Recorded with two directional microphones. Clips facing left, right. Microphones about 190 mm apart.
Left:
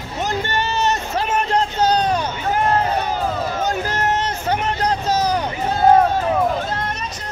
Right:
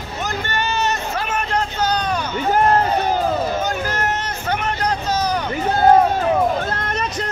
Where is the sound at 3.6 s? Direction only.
30° left (ahead or behind).